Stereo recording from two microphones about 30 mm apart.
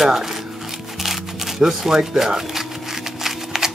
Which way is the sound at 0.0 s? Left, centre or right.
Centre.